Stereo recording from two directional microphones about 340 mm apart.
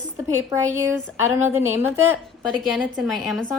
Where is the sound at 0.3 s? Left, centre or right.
Centre.